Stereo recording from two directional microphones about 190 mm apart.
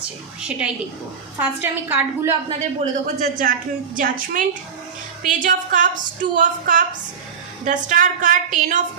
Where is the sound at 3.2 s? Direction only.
45° right (ahead or behind).